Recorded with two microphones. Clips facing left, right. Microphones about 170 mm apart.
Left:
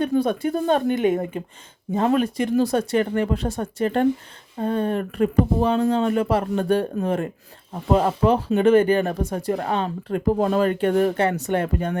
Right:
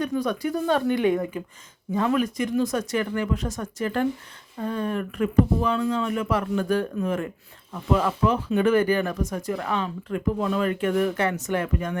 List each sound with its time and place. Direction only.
0.0 s speech: 30° left (ahead or behind)
0.9 s speech: 20° left (ahead or behind)